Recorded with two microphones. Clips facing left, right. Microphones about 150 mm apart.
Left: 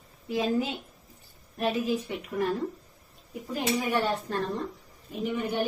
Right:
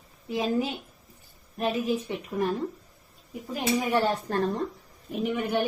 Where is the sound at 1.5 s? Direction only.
25° right (ahead or behind).